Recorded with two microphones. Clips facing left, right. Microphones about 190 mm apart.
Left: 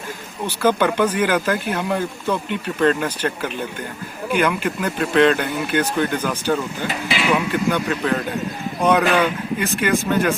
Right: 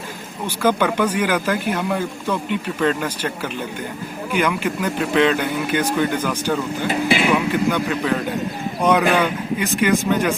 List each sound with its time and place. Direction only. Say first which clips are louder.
0.4 s speech: left 1 dB; 10° right (ahead or behind)
6.8 s speech: right 5 dB; 50° right (ahead or behind)
7.5 s speech: right 1 dB; 10° right (ahead or behind)